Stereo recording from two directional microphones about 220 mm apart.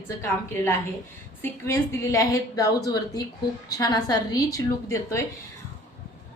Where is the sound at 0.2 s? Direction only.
10° left (ahead or behind).